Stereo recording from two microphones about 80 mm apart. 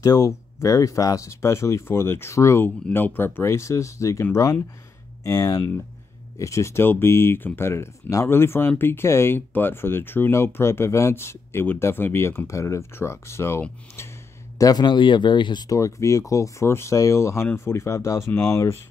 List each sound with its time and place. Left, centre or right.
0.0 s speech: left
2.6 s speech: left
14.6 s a man's voice: left
14.9 s speech: left
15.7 s speech: left